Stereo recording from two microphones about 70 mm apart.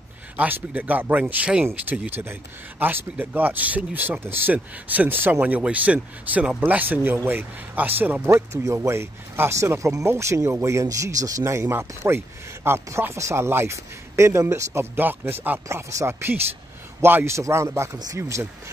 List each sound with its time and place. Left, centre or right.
0.4 s speech: right
1.7 s speech: right
8.3 s speech: right
11.4 s speech: right
15.7 s speech: right
16.1 s speech: right